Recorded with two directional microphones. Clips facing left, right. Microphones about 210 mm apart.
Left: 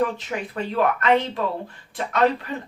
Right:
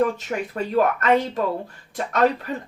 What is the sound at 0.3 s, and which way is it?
Speech, 45° right (ahead or behind).